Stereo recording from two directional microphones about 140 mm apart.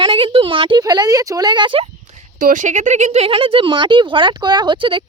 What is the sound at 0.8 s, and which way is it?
Speech, 25° right (ahead or behind).